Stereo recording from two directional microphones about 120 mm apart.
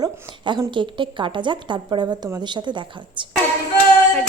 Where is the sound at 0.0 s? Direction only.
40° right (ahead or behind).